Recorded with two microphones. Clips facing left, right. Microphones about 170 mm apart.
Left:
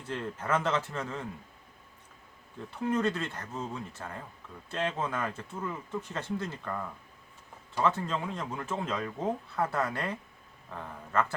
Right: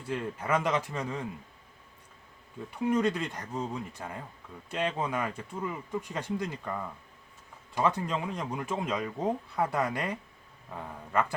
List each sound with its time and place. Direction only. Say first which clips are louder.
0.1 s speech: right 1 dB; 10° right (ahead or behind)
2.6 s speech: right 2 dB; 10° right (ahead or behind)